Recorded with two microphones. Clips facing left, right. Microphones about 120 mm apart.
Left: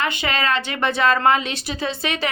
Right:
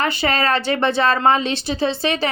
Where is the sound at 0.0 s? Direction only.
35° right (ahead or behind).